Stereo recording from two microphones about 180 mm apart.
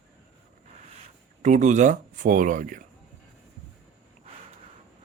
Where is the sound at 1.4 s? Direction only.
40° right (ahead or behind).